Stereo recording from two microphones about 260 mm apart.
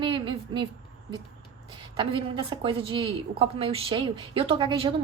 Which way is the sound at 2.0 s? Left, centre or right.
Centre.